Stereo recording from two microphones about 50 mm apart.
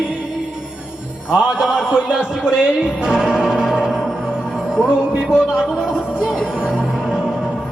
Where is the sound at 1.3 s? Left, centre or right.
Centre.